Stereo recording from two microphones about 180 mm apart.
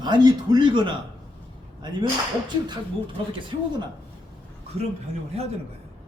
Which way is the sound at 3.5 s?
25° right (ahead or behind).